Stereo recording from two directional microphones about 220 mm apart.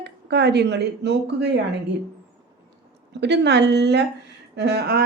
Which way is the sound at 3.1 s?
50° right (ahead or behind).